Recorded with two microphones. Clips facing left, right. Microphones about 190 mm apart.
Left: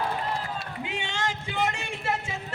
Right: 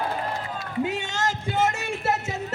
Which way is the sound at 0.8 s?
40° right (ahead or behind).